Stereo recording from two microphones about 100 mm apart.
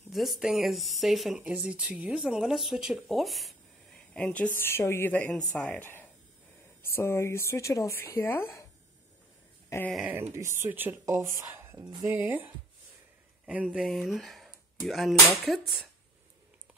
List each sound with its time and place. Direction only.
0.1 s speech: centre (ahead or behind)
4.1 s speech: 15° left (ahead or behind)
9.7 s speech: 30° left (ahead or behind)
10.1 s speech: 25° right (ahead or behind)
13.7 s speech: centre (ahead or behind)